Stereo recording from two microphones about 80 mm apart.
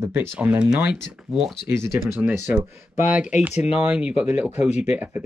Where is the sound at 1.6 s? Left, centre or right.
Right.